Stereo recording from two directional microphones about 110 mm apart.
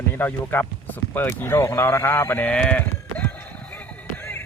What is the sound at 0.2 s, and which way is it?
Speech, 20° left (ahead or behind).